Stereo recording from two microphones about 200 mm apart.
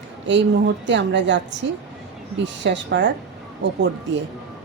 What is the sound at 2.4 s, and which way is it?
A woman's voice, 60° right (ahead or behind).